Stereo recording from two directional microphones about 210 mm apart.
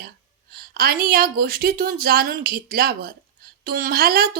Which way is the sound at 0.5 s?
45° right (ahead or behind).